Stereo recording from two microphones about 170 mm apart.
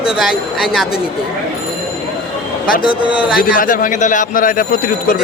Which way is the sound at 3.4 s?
55° left (ahead or behind).